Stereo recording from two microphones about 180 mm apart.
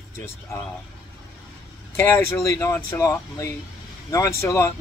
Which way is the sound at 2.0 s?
15° left (ahead or behind).